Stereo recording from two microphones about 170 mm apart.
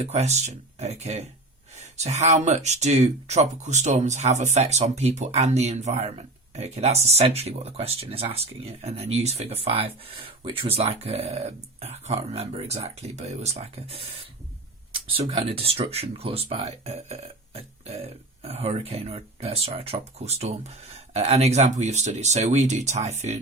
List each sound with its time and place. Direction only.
0.0 s speech: 40° right (ahead or behind)
15.2 s speech: 25° right (ahead or behind)